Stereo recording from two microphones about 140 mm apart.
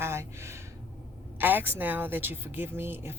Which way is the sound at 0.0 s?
20° right (ahead or behind).